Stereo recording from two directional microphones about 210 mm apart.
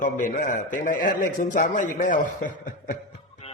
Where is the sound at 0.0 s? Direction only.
35° left (ahead or behind).